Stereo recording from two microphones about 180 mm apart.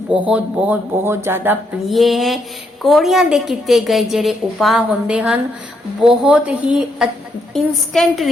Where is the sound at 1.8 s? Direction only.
Centre (ahead or behind).